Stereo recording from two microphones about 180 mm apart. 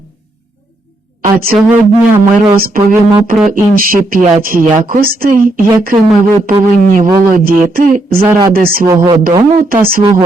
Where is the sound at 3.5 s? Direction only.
50° right (ahead or behind).